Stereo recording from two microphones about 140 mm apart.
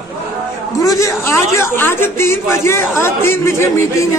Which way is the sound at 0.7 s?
25° left (ahead or behind).